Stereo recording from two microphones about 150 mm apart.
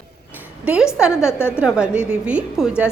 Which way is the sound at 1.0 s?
5° right (ahead or behind).